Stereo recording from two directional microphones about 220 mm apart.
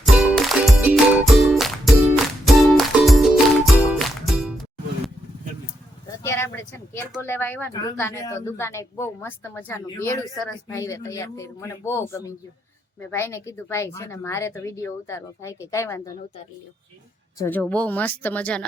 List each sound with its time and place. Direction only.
0.0 s music: centre (ahead or behind)
6.2 s a sound: 10° left (ahead or behind)
7.2 s speech: 10° left (ahead or behind)
10.8 s speech: 15° left (ahead or behind)
17.3 s speech: 10° left (ahead or behind)